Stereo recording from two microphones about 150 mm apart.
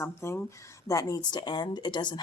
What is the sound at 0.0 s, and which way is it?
Speech, 20° left (ahead or behind).